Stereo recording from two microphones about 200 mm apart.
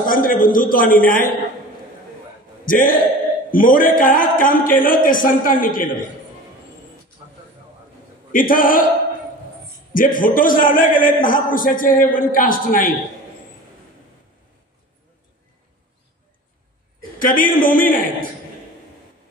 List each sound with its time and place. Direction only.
0.1 s a man's voice: 45° left (ahead or behind)
2.6 s a man's voice: 45° left (ahead or behind)
8.3 s a man's voice: 45° left (ahead or behind)
9.9 s a man's voice: 45° left (ahead or behind)
17.2 s a man's voice: 45° left (ahead or behind)